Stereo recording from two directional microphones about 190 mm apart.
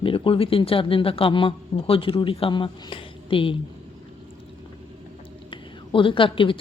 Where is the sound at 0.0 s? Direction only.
30° left (ahead or behind).